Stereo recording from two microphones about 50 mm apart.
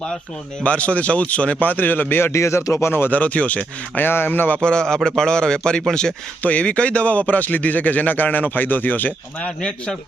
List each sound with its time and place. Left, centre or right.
0.6 s speech: left
2.3 s speech: left
3.1 s speech: left
4.0 s a man's voice: left
4.6 s a man's voice: centre
6.4 s a man's voice: left
9.4 s speech: centre